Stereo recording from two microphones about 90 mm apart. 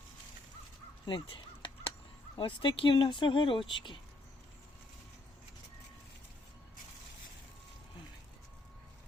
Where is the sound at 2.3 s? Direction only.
70° left (ahead or behind).